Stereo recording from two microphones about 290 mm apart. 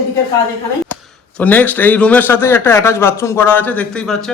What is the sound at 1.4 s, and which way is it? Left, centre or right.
A man's voice, centre.